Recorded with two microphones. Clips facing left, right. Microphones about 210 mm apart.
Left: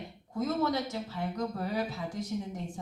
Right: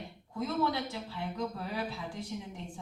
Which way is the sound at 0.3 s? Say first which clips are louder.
Left 2 dB; 40° left (ahead or behind).